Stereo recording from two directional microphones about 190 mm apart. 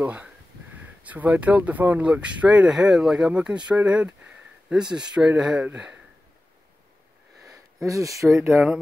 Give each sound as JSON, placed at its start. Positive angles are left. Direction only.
{"t": 0.0, "sound": "speech", "side_deg": -5}
{"t": 7.4, "sound": "a sound", "side_deg": -15}
{"t": 8.4, "sound": "speech", "side_deg": -5}